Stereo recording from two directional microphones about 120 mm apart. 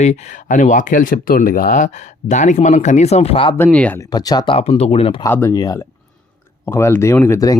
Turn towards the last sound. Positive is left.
turn(degrees=25)  # may be behind; listen again after turning